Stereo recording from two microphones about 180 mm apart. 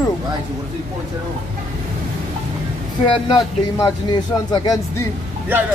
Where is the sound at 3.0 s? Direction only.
30° left (ahead or behind).